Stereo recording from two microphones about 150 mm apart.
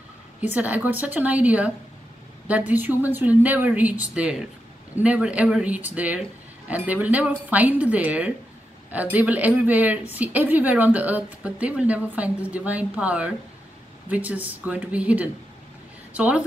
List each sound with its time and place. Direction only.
0.4 s a woman's voice: 10° right (ahead or behind)